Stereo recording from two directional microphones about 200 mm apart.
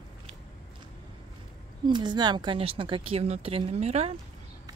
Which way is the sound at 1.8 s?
20° right (ahead or behind).